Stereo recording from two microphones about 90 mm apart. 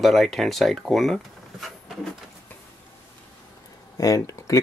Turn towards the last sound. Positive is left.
turn(degrees=35)  # may be behind; listen again after turning